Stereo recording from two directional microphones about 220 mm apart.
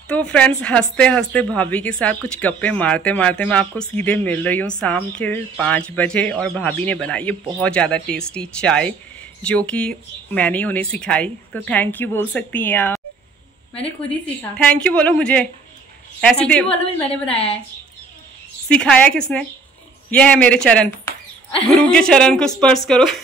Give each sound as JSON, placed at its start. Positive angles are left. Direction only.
{"t": 0.1, "sound": "speech", "side_deg": 5}
{"t": 14.2, "sound": "speech", "side_deg": 5}
{"t": 17.3, "sound": "a woman's voice", "side_deg": 25}
{"t": 18.7, "sound": "speech", "side_deg": 5}